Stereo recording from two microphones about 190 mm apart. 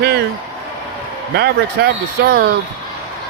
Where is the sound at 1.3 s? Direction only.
55° right (ahead or behind).